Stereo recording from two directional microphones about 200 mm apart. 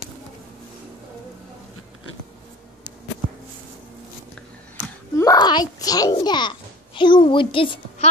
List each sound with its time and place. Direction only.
5.1 s a child's voice: 15° left (ahead or behind)